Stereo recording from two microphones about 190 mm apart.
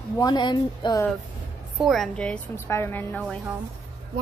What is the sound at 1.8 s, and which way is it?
A woman's voice, centre (ahead or behind).